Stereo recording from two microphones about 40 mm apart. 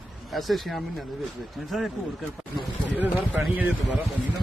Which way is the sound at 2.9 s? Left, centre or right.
Right.